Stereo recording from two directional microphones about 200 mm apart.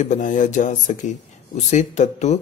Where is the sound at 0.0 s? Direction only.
40° left (ahead or behind).